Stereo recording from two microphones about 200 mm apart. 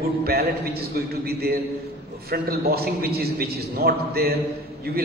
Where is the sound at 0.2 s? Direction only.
50° right (ahead or behind).